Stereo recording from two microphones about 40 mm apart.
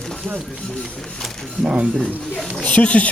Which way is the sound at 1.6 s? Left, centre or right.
Right.